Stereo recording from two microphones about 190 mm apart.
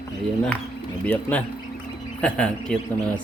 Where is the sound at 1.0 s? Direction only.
10° left (ahead or behind).